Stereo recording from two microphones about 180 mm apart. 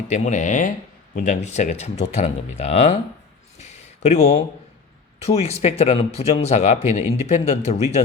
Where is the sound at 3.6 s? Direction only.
40° left (ahead or behind).